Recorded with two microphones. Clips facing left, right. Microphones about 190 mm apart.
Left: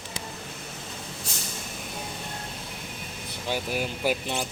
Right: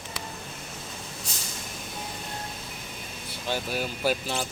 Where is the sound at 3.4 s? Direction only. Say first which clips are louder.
Left 1 dB; 15° left (ahead or behind).